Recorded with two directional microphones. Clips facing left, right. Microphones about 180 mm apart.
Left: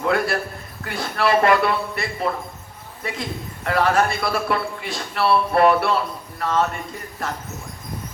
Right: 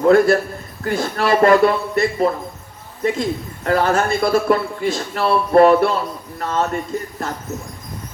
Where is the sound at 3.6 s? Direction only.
40° right (ahead or behind).